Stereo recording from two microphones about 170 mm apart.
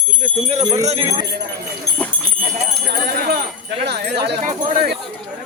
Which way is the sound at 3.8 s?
75° right (ahead or behind).